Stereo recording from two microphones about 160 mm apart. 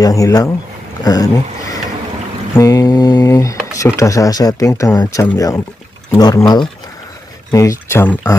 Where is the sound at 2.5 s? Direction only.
20° left (ahead or behind).